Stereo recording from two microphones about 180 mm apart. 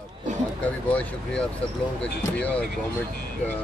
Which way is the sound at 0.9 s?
5° left (ahead or behind).